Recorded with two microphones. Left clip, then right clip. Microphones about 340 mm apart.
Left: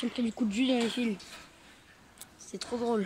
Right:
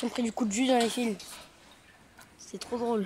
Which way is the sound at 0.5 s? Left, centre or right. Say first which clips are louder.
Right 4 dB; centre.